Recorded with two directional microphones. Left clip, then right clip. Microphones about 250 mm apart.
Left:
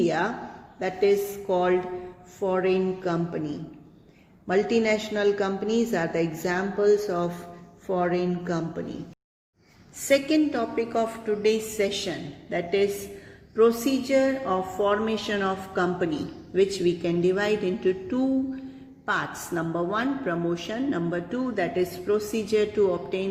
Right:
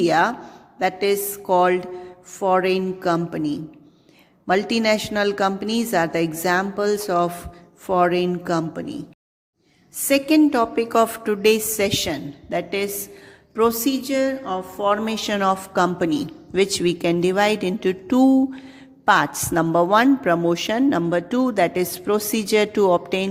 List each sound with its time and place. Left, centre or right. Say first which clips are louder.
0.0 s a woman's voice: right 7 dB; right
10.1 s a woman's voice: right 5 dB; right
14.0 s music: left 3 dB; right
14.8 s a woman's voice: right 6 dB; right